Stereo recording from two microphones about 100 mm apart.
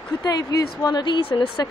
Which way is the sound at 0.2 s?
40° left (ahead or behind).